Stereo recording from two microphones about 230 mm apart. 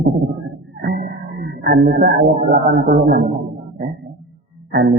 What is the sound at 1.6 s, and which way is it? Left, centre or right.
Speech, right.